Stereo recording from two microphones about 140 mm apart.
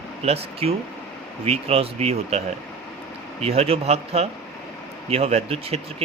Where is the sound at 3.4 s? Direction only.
45° right (ahead or behind).